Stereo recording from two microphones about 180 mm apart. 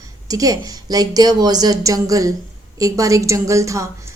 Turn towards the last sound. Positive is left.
turn(degrees=-15)  # may be behind; listen again after turning